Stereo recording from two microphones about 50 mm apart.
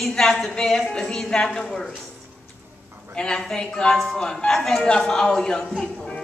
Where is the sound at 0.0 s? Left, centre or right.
Centre.